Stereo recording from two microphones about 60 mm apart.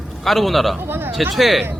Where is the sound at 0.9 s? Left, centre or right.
Right.